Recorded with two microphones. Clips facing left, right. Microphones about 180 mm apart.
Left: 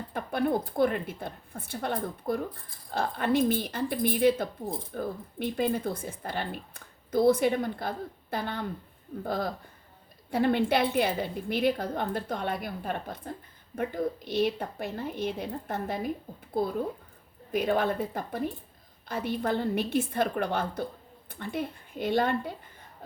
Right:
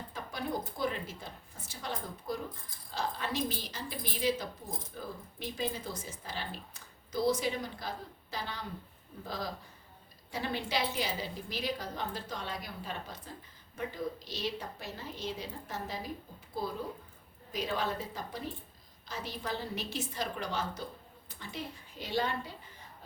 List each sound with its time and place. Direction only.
0.1 s speech: 55° left (ahead or behind)